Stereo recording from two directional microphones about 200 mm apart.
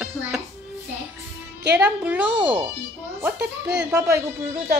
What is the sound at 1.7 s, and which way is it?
Speech, 5° right (ahead or behind).